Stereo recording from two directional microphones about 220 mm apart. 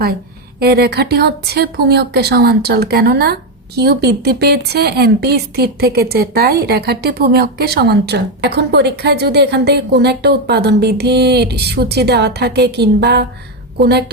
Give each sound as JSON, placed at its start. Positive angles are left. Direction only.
{"t": 0.6, "sound": "speech", "side_deg": -45}